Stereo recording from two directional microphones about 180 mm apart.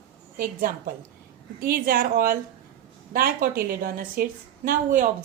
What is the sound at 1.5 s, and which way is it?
Speech, 55° right (ahead or behind).